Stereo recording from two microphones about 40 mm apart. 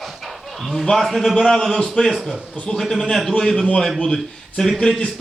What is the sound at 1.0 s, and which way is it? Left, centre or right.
Speech, centre.